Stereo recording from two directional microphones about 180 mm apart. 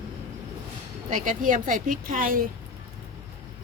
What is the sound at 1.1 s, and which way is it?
Speech, 45° right (ahead or behind).